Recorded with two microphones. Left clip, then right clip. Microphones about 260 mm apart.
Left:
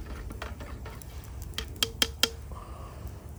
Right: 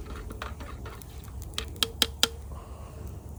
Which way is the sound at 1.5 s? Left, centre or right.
Centre.